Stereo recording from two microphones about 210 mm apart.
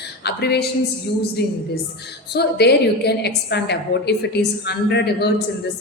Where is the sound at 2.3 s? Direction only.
50° left (ahead or behind).